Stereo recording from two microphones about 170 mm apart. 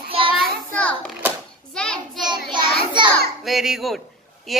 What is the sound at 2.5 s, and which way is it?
Child singing, 25° right (ahead or behind).